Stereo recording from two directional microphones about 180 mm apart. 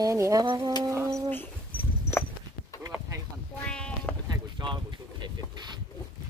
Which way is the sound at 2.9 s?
20° right (ahead or behind).